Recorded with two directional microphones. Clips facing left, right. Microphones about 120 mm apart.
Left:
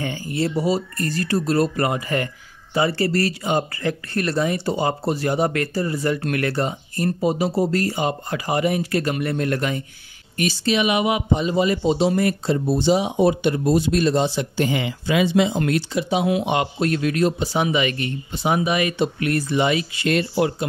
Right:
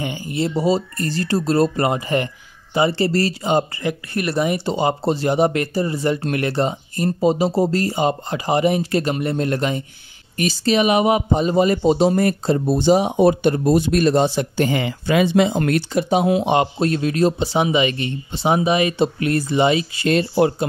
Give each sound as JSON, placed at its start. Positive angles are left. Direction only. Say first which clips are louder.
{"t": 0.0, "sound": "speech", "louder": "right 1 dB", "side_deg": -20}
{"t": 3.8, "sound": "speech", "louder": "right 1 dB", "side_deg": -10}
{"t": 10.3, "sound": "speech", "louder": "right 3 dB", "side_deg": -35}
{"t": 16.3, "sound": "speech", "louder": "right 4 dB", "side_deg": -30}